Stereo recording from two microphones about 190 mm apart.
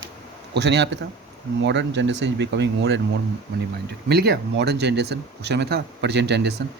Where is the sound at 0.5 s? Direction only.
65° right (ahead or behind).